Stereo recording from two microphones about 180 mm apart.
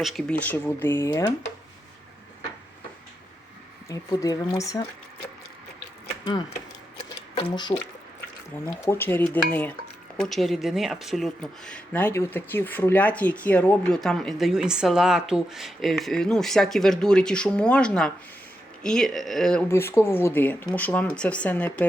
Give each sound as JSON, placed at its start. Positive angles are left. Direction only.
{"t": 0.0, "sound": "speech", "side_deg": 0}
{"t": 3.8, "sound": "speech", "side_deg": 20}
{"t": 7.3, "sound": "speech", "side_deg": 25}
{"t": 8.8, "sound": "speech", "side_deg": 15}
{"t": 19.6, "sound": "speech", "side_deg": 15}